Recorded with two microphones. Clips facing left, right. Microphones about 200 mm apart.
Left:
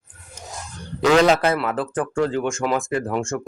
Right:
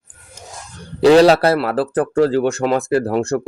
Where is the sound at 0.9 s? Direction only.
35° right (ahead or behind).